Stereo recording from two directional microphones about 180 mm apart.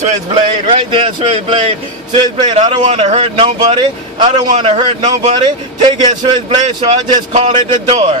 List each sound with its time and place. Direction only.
0.0 s a man's voice: 35° right (ahead or behind)
2.8 s a man's voice: 35° right (ahead or behind)